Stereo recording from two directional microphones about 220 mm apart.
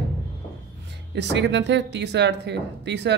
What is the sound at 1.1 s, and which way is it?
Speech, 50° right (ahead or behind).